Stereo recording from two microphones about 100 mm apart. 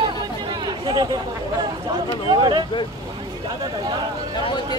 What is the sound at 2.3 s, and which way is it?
Speech, 50° right (ahead or behind).